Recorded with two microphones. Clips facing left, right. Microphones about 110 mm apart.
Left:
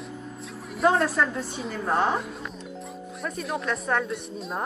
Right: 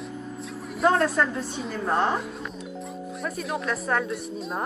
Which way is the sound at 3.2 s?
Centre (ahead or behind).